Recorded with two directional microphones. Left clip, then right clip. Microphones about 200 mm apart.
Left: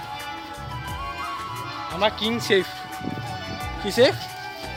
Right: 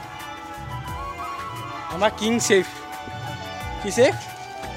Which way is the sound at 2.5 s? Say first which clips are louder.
Right 2 dB; 25° right (ahead or behind).